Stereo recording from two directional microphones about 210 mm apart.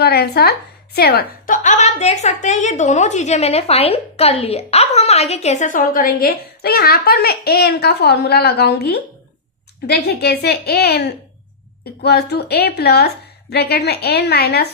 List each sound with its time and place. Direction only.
0.0 s a woman's voice: 50° left (ahead or behind)